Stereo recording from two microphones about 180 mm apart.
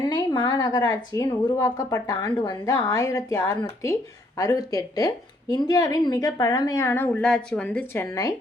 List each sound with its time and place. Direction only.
0.1 s speech: 25° left (ahead or behind)